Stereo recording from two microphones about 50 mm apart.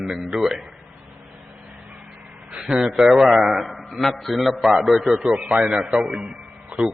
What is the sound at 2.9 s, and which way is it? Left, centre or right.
A man's voice, centre.